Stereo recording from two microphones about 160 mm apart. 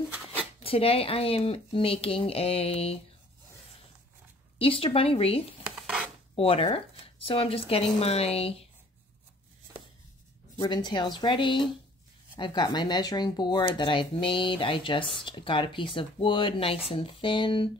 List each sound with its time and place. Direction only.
0.7 s speech: 35° left (ahead or behind)
4.6 s speech: 35° left (ahead or behind)
5.8 s filing: 5° right (ahead or behind)
6.3 s speech: 35° left (ahead or behind)
10.6 s speech: 30° left (ahead or behind)